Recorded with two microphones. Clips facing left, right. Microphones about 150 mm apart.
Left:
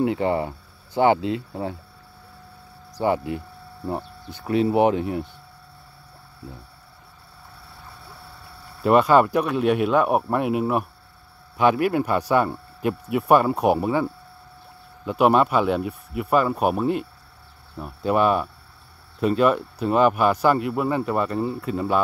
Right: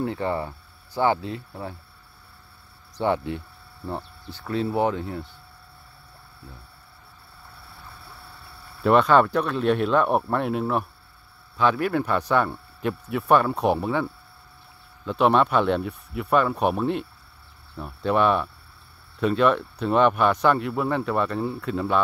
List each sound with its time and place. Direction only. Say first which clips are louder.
0.0 s speech: left 5 dB; 15° left (ahead or behind)
3.0 s speech: left 2 dB; 5° left (ahead or behind)
3.9 s speech: left 3 dB; 15° left (ahead or behind)
8.8 s speech: left 1 dB; 5° left (ahead or behind)
15.0 s speech: left 2 dB; 10° left (ahead or behind)